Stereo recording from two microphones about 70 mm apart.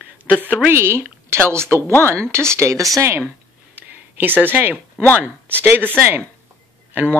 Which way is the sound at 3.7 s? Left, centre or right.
Right.